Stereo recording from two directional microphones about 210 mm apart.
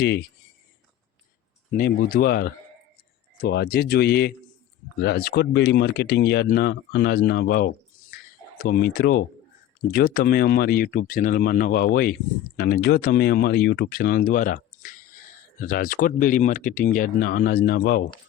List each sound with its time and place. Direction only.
0.0 s speech: 50° left (ahead or behind)
1.7 s speech: 45° left (ahead or behind)